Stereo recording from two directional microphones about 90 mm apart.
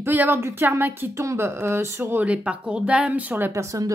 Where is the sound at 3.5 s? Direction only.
35° right (ahead or behind).